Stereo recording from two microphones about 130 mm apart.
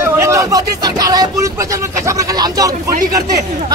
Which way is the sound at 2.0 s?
30° right (ahead or behind).